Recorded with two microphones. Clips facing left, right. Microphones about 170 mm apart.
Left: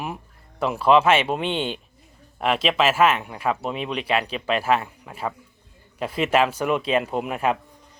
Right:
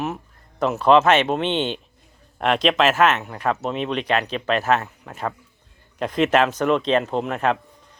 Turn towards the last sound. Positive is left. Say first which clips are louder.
# right 2 dB
turn(degrees=10)  # may be behind; listen again after turning